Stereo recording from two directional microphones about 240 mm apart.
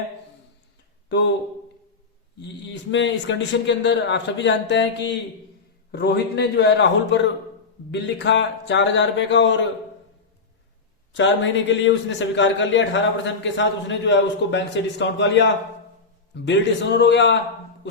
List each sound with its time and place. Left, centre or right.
2.4 s speech: left
11.1 s speech: left